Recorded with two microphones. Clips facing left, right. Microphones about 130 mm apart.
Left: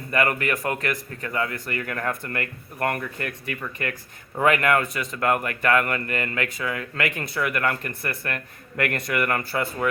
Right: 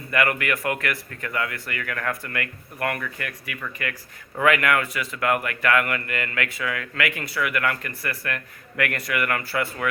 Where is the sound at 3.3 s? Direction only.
25° left (ahead or behind).